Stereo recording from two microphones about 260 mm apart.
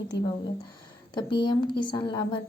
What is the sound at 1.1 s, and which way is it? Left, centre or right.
A woman's voice, centre.